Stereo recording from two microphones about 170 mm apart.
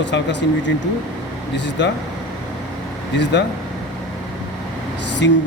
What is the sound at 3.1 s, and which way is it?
Speech, 90° left.